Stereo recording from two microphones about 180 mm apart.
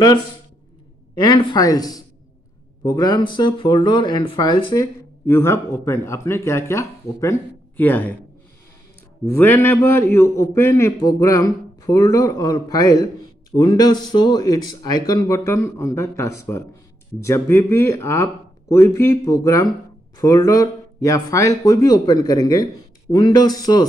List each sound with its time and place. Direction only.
1.1 s speech: 25° left (ahead or behind)
5.2 s speech: 15° left (ahead or behind)
9.2 s speech: 10° left (ahead or behind)